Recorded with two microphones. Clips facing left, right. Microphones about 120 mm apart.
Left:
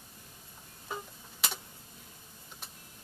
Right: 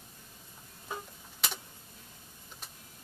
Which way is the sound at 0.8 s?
Centre (ahead or behind).